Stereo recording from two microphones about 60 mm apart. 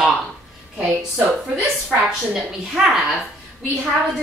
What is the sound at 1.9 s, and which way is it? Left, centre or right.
A woman's voice, centre.